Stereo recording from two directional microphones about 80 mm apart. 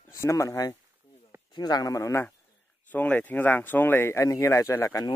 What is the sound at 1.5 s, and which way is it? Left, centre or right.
Speech, left.